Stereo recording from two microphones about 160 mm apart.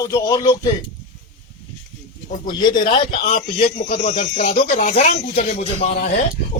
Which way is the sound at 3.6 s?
45° left (ahead or behind).